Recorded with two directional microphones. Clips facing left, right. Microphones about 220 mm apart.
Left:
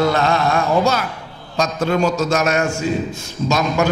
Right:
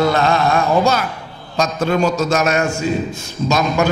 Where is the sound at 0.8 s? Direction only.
10° right (ahead or behind).